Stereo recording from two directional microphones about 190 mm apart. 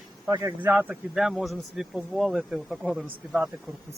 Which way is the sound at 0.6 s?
10° right (ahead or behind).